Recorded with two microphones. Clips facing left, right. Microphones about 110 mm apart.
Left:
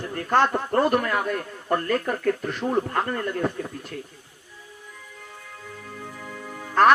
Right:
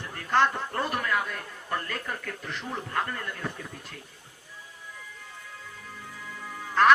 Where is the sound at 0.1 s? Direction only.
45° left (ahead or behind).